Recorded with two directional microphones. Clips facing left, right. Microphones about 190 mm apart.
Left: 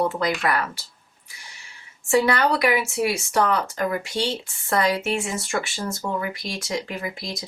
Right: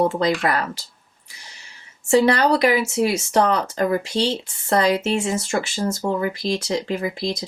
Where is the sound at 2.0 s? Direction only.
25° right (ahead or behind).